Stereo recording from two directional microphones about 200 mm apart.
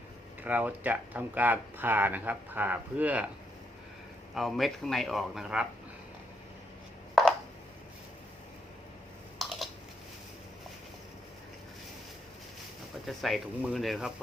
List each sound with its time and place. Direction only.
0.4 s speech: 10° right (ahead or behind)
4.4 s speech: centre (ahead or behind)
7.2 s chopping: centre (ahead or behind)
9.4 s a sound: centre (ahead or behind)
13.1 s speech: centre (ahead or behind)